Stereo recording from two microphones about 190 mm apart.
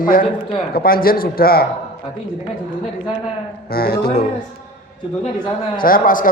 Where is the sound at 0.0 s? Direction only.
50° left (ahead or behind).